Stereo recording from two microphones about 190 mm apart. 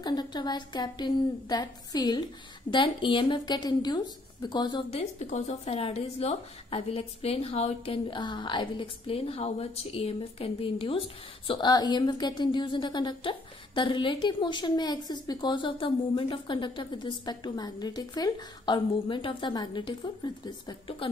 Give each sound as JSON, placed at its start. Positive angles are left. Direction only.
{"t": 0.0, "sound": "a woman's voice", "side_deg": 20}
{"t": 5.2, "sound": "a woman's voice", "side_deg": 35}